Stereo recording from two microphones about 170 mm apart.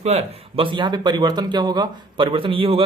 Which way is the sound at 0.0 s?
40° right (ahead or behind).